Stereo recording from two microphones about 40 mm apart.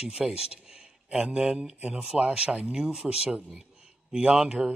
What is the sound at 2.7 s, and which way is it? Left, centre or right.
Speech, centre.